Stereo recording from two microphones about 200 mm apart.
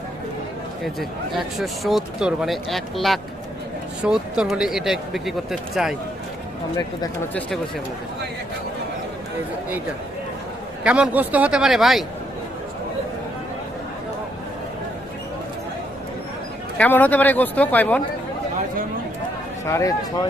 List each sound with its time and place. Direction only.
0.9 s speech: centre (ahead or behind)
10.8 s speech: 5° right (ahead or behind)
16.7 s speech: 5° left (ahead or behind)
19.6 s speech: 15° left (ahead or behind)